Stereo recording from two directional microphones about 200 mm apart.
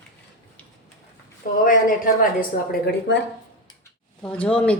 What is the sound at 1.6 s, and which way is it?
Speech, 45° left (ahead or behind).